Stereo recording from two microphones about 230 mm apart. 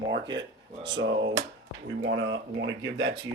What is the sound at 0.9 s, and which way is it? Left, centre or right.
Speech, right.